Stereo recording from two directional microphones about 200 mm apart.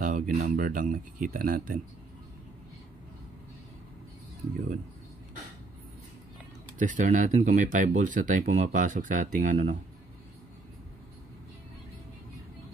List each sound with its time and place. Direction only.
0.0 s speech: 40° right (ahead or behind)
6.8 s speech: 40° right (ahead or behind)